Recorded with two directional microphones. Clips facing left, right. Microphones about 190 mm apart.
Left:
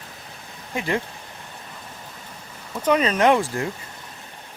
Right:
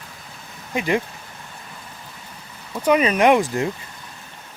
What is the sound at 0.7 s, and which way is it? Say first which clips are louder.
Speech: right 4 dB; 15° right (ahead or behind).